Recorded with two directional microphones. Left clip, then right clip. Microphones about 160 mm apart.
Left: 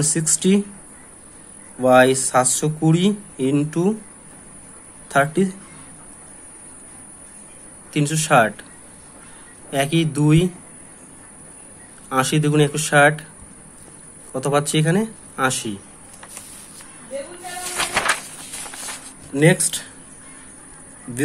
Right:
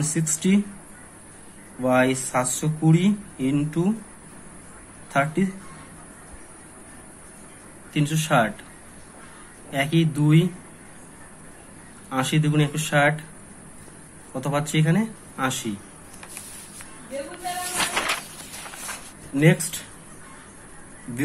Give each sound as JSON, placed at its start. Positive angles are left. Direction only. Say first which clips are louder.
{"t": 0.0, "sound": "speech", "louder": "left 5 dB", "side_deg": 55}
{"t": 1.8, "sound": "speech", "louder": "left 7 dB", "side_deg": 55}
{"t": 5.1, "sound": "speech", "louder": "left 5 dB", "side_deg": 55}
{"t": 7.9, "sound": "speech", "louder": "left 5 dB", "side_deg": 55}
{"t": 9.7, "sound": "speech", "louder": "left 3 dB", "side_deg": 55}
{"t": 12.1, "sound": "speech", "louder": "left 5 dB", "side_deg": 55}
{"t": 14.3, "sound": "speech", "louder": "left 6 dB", "side_deg": 50}
{"t": 19.3, "sound": "speech", "louder": "left 4 dB", "side_deg": 55}